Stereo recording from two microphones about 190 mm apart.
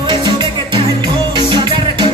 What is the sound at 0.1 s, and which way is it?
Music, 25° right (ahead or behind).